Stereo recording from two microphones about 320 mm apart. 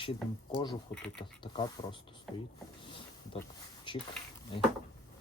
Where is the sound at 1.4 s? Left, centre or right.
Centre.